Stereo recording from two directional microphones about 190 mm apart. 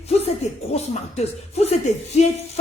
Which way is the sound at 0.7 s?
35° left (ahead or behind).